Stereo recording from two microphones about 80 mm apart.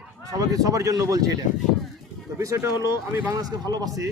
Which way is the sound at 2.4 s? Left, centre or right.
Right.